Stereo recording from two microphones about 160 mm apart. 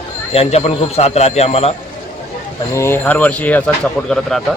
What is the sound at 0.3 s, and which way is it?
Speech, 40° left (ahead or behind).